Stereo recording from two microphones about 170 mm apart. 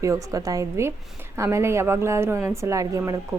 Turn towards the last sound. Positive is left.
turn(degrees=-20)  # may be behind; listen again after turning